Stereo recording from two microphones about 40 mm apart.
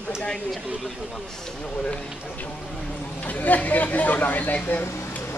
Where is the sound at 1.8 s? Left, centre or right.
Left.